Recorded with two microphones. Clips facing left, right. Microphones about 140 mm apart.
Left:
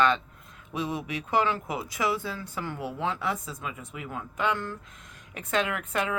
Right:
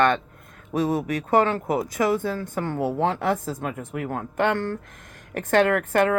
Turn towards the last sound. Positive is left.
turn(degrees=-60)  # may be behind; listen again after turning